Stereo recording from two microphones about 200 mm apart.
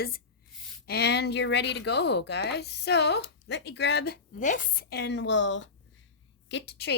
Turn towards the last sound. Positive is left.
turn(degrees=55)  # may be behind; listen again after turning